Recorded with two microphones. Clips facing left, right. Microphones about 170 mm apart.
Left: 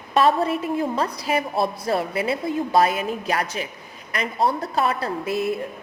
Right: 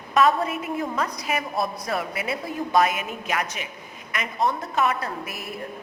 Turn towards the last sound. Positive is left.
turn(degrees=30)  # may be behind; listen again after turning